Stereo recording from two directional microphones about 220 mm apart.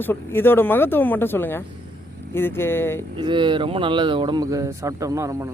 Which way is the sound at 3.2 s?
20° right (ahead or behind).